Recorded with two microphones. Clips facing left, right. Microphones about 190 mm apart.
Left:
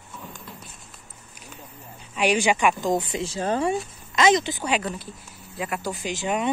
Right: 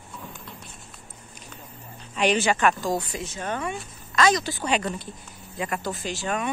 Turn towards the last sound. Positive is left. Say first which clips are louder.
# left 3 dB
turn(degrees=15)  # may be behind; listen again after turning